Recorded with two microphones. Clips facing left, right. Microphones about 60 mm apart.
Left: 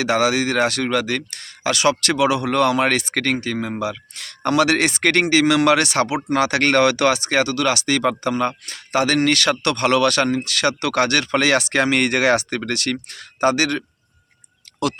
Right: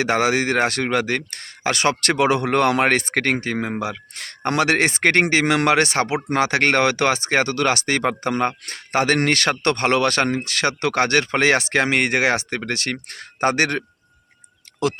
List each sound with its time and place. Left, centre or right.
0.0 s speech: right
13.1 s speech: right